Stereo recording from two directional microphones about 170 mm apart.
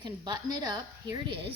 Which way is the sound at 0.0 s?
25° right (ahead or behind).